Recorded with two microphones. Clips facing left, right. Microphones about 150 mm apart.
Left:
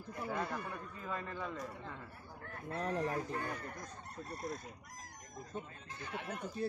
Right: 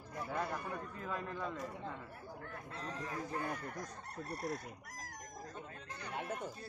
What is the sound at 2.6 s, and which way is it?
Speech, 60° left (ahead or behind).